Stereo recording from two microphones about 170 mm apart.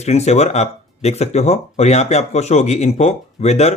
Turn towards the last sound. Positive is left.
turn(degrees=40)  # may be behind; listen again after turning